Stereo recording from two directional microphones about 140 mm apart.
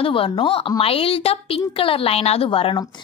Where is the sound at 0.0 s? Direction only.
40° left (ahead or behind).